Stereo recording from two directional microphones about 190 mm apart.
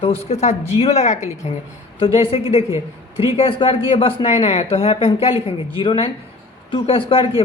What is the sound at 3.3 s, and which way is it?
Speech, 30° left (ahead or behind).